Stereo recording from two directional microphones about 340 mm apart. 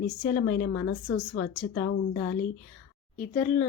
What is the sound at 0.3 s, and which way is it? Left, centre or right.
A woman's voice, left.